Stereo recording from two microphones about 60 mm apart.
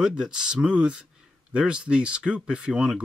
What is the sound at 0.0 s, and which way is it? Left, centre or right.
Speech, centre.